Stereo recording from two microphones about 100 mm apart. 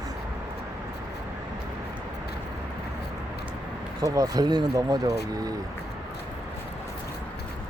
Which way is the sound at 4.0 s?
40° right (ahead or behind).